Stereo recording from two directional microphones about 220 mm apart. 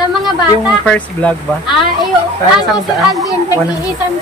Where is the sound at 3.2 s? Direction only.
15° left (ahead or behind).